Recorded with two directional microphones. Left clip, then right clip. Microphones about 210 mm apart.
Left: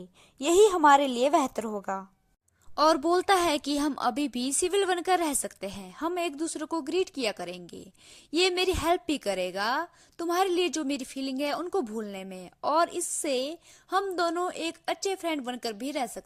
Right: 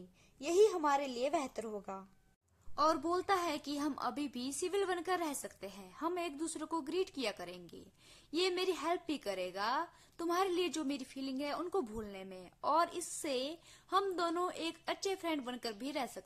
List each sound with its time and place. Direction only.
0.3 s a woman's voice: 35° left (ahead or behind)